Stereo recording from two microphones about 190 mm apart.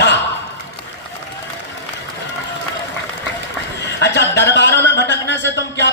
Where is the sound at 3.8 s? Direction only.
65° left (ahead or behind).